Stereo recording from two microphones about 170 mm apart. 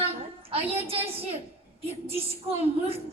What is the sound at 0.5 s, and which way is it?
Speech, 35° right (ahead or behind).